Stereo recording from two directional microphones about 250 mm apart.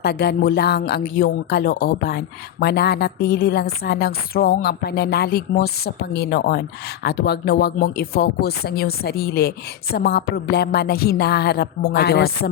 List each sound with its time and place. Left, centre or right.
0.0 s speech: left